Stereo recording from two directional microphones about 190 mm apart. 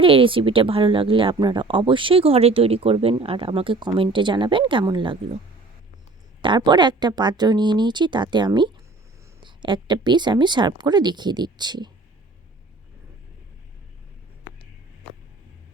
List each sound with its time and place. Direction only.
0.0 s speech: 30° right (ahead or behind)
6.4 s speech: 25° right (ahead or behind)